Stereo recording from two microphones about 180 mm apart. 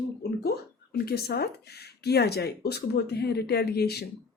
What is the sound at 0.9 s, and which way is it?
Speech, 60° left (ahead or behind).